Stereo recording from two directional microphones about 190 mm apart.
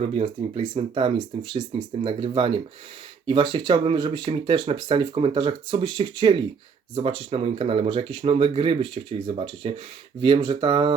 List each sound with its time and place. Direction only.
0.0 s speech: 35° right (ahead or behind)